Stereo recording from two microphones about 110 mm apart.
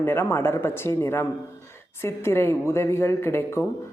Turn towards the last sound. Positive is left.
turn(degrees=25)  # may be behind; listen again after turning